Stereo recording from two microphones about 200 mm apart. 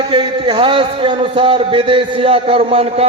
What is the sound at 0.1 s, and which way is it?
A man's voice, 25° right (ahead or behind).